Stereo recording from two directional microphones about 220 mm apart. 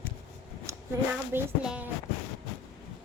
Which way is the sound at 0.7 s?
15° right (ahead or behind).